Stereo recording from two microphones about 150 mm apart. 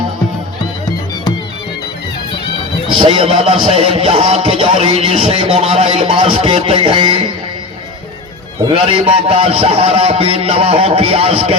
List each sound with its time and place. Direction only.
3.0 s music: 35° right (ahead or behind)
8.7 s music: 40° right (ahead or behind)